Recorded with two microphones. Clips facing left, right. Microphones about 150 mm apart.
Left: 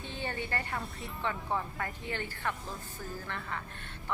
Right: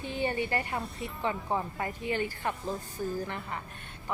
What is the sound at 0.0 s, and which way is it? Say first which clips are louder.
Speech: right 7 dB; 15° right (ahead or behind).